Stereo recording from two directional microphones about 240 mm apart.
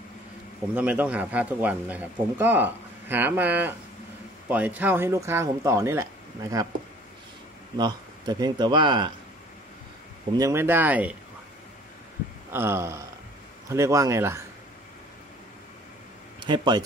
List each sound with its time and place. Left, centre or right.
0.7 s speech: centre
7.7 s speech: centre
10.3 s speech: centre
12.5 s speech: centre
16.3 s speech: centre